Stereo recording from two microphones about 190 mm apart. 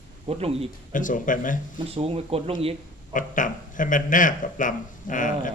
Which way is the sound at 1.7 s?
30° right (ahead or behind).